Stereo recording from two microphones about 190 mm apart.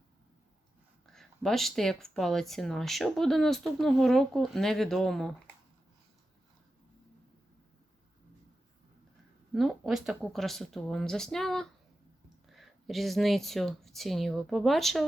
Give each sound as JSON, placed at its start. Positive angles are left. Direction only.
{"t": 1.0, "sound": "speech", "side_deg": 0}
{"t": 9.5, "sound": "speech", "side_deg": 0}